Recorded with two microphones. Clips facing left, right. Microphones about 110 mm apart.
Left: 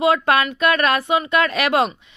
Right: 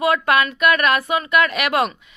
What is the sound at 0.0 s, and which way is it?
A woman's voice, 30° left (ahead or behind).